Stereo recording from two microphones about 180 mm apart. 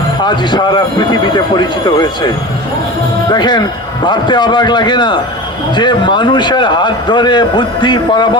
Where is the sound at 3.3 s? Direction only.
25° left (ahead or behind).